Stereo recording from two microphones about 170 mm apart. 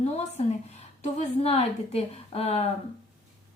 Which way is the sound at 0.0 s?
40° left (ahead or behind).